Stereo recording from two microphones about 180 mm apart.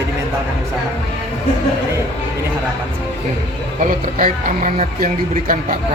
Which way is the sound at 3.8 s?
45° right (ahead or behind).